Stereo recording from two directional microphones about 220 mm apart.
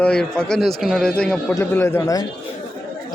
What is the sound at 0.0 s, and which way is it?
Speech, 5° left (ahead or behind).